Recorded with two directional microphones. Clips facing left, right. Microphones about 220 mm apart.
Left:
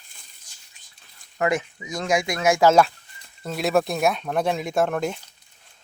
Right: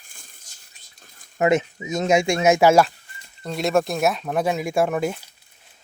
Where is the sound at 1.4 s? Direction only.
25° right (ahead or behind).